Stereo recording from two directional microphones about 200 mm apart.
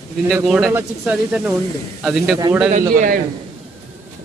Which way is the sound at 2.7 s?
40° right (ahead or behind).